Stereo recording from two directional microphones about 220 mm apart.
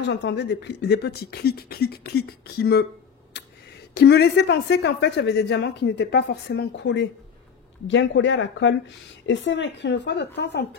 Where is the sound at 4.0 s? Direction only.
50° left (ahead or behind).